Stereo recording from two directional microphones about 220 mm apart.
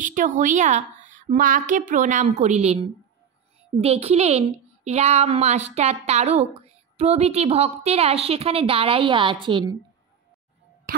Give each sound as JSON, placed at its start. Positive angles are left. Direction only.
{"t": 0.0, "sound": "a woman's voice", "side_deg": -35}